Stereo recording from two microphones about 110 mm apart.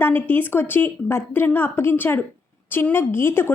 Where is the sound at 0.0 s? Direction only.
20° left (ahead or behind).